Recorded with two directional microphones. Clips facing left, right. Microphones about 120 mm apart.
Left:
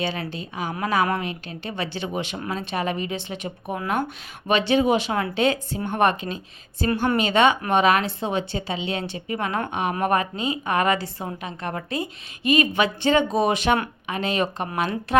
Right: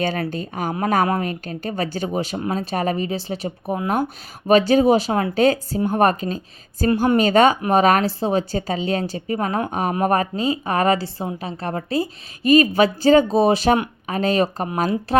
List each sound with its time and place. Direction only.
0.0 s a woman's voice: 50° right (ahead or behind)